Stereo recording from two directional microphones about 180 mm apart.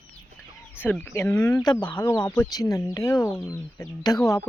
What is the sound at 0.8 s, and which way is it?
Speech, 10° left (ahead or behind).